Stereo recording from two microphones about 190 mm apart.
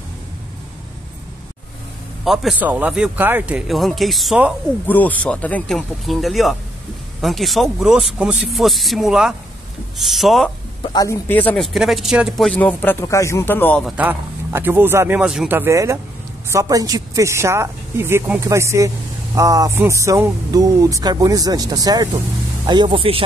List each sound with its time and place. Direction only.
2.2 s speech: centre (ahead or behind)
4.8 s speech: 10° left (ahead or behind)
10.8 s a man's voice: 20° left (ahead or behind)
13.9 s speech: 10° right (ahead or behind); by 23.2 s 30° right (ahead or behind)